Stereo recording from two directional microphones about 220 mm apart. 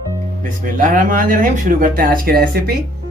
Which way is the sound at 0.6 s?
35° right (ahead or behind).